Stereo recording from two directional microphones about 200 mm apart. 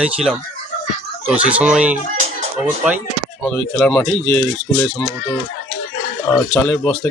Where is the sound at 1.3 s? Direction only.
5° right (ahead or behind).